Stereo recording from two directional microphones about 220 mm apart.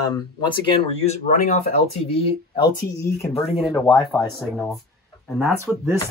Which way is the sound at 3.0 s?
15° left (ahead or behind).